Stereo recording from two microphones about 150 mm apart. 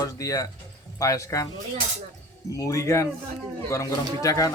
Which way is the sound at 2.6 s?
20° left (ahead or behind).